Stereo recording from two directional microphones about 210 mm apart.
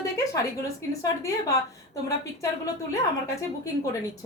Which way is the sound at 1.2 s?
15° left (ahead or behind).